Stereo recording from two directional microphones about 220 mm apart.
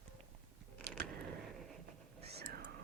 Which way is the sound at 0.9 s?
50° right (ahead or behind).